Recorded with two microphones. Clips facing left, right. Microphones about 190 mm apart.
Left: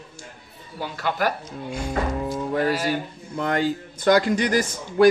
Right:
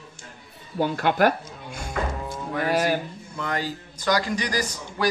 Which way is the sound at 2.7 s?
55° right (ahead or behind).